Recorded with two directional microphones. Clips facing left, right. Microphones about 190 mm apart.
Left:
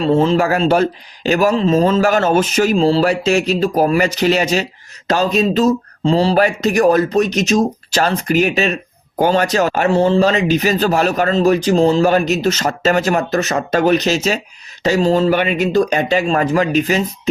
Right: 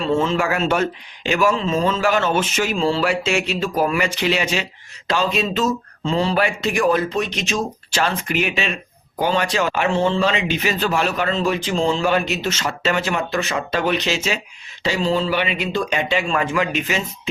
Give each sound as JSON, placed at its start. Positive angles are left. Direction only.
{"t": 0.0, "sound": "speech", "side_deg": 35}